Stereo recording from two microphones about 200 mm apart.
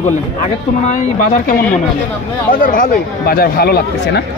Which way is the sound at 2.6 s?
40° left (ahead or behind).